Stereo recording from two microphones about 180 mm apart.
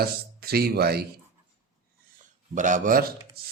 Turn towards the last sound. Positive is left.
turn(degrees=-60)  # may be behind; listen again after turning